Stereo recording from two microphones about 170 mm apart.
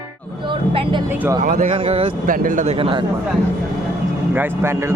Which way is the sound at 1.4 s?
50° right (ahead or behind).